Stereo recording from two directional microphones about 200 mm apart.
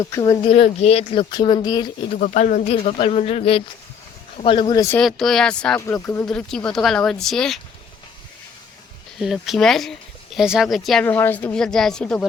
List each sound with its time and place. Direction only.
0.0 s speech: 15° left (ahead or behind)
2.2 s speech: 40° left (ahead or behind); by 4.9 s 15° left (ahead or behind)
4.9 s speech: centre (ahead or behind)
9.1 s speech: centre (ahead or behind)